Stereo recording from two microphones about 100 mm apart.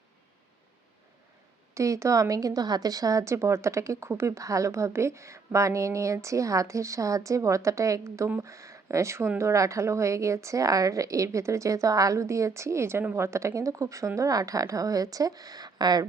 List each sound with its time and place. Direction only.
1.7 s a woman's voice: 30° right (ahead or behind)